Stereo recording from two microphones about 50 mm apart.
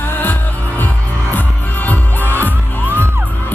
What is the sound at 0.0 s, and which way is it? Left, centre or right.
Music, left.